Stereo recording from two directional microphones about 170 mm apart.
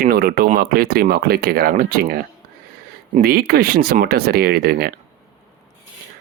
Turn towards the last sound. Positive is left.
turn(degrees=-60)  # may be behind; listen again after turning